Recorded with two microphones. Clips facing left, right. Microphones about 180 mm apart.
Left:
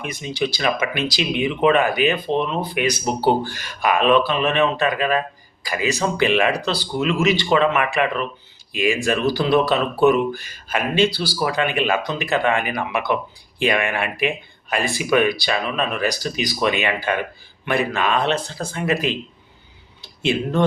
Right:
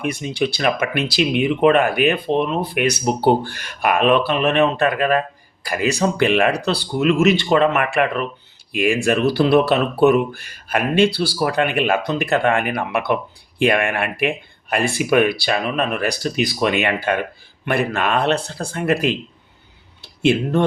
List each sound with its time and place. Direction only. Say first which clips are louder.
0.0 s speech: right 3 dB; 60° right (ahead or behind)